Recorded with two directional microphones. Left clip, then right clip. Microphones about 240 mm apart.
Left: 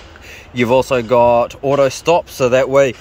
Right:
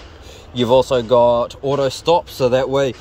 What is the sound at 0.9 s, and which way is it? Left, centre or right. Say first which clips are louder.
Speech: left 1 dB; left.